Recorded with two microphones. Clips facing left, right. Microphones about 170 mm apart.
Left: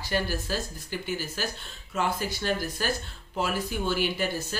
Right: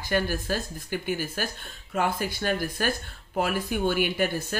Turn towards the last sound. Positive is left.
turn(degrees=-55)  # may be behind; listen again after turning